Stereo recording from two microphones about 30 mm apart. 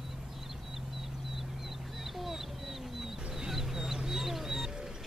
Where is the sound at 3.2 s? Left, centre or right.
Right.